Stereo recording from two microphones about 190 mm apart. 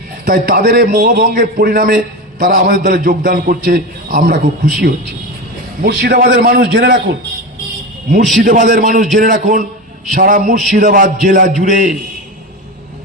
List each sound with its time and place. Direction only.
0.3 s a man's voice: 50° right (ahead or behind)
5.8 s a man's voice: 55° right (ahead or behind)
8.4 s a man's voice: 45° right (ahead or behind)